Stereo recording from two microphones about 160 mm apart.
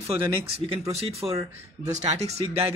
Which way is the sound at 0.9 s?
40° right (ahead or behind).